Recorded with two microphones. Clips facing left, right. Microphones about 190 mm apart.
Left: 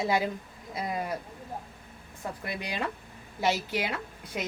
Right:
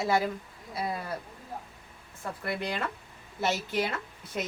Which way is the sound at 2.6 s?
15° left (ahead or behind).